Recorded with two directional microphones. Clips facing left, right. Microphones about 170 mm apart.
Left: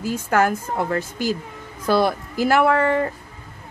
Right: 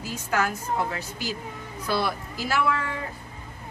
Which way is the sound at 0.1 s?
55° left (ahead or behind).